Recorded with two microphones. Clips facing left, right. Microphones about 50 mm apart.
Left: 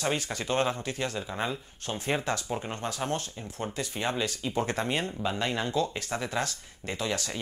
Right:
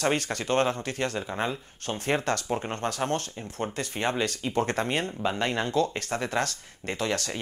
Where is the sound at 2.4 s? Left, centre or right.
Right.